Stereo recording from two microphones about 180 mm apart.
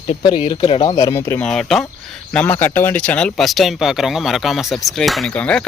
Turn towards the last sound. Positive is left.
turn(degrees=5)  # may be behind; listen again after turning